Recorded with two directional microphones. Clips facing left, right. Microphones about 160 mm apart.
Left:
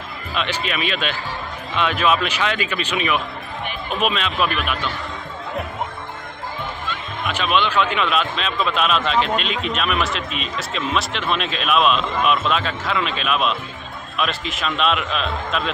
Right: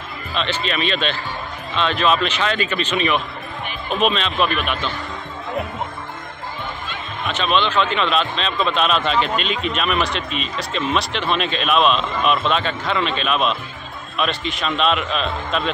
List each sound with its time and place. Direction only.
0.3 s a man's voice: 10° left (ahead or behind)
7.2 s a man's voice: 10° left (ahead or behind)